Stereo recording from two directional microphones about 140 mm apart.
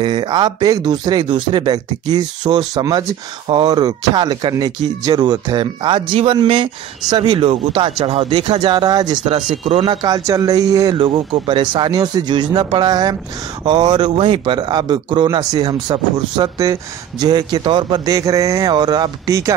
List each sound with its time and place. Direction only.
0.0 s speech: 35° right (ahead or behind)
11.0 s speech: 45° right (ahead or behind); by 19.5 s 25° right (ahead or behind)